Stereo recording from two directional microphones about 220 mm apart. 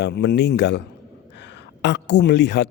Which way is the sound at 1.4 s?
50° left (ahead or behind).